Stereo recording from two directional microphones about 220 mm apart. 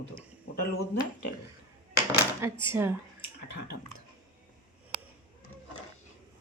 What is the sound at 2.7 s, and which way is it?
Speech, 10° right (ahead or behind).